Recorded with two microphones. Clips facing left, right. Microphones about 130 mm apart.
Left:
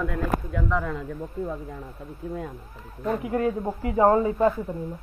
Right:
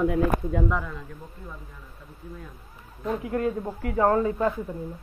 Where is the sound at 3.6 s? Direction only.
20° left (ahead or behind).